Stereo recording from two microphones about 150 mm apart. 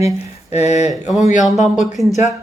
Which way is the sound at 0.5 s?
50° left (ahead or behind).